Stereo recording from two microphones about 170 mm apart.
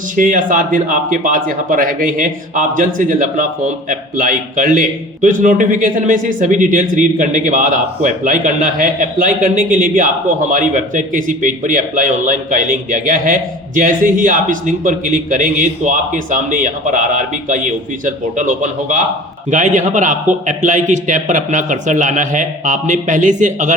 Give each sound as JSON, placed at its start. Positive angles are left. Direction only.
{"t": 0.2, "sound": "speech", "side_deg": -50}